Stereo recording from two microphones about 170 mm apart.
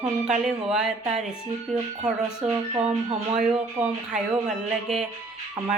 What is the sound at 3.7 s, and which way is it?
Speech, 10° right (ahead or behind).